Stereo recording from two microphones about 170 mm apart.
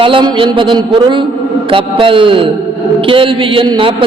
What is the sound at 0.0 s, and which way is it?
A man's voice, 30° right (ahead or behind).